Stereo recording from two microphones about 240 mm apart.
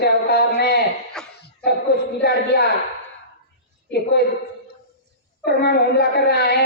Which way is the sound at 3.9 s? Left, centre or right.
Left.